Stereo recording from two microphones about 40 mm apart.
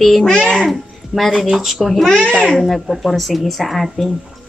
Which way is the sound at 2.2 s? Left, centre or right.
Left.